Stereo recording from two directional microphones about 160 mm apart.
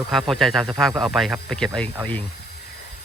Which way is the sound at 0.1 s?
Centre (ahead or behind).